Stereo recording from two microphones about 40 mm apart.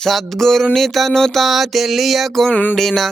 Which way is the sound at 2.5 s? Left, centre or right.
Left.